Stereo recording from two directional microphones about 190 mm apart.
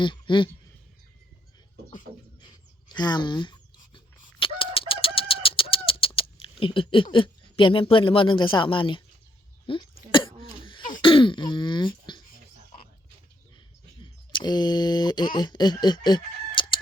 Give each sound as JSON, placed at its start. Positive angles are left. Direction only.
{"t": 0.0, "sound": "speech", "side_deg": 25}
{"t": 2.9, "sound": "chicken", "side_deg": 25}
{"t": 6.4, "sound": "speech", "side_deg": 30}
{"t": 9.7, "sound": "a sound", "side_deg": 30}
{"t": 10.6, "sound": "cough", "side_deg": 25}
{"t": 11.0, "sound": "throat clearing", "side_deg": 25}
{"t": 14.0, "sound": "speech", "side_deg": 25}